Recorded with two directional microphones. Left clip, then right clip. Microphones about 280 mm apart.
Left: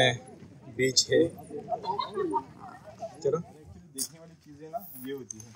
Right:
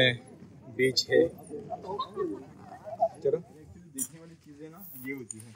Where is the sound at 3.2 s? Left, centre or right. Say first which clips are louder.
Even; centre.